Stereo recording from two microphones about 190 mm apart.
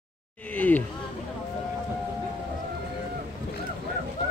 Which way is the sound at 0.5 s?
10° left (ahead or behind).